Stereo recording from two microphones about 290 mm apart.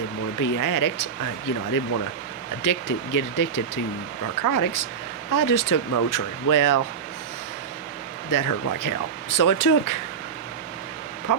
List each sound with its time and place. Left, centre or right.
0.3 s speech: left
2.6 s speech: left
8.3 s speech: left
11.3 s speech: left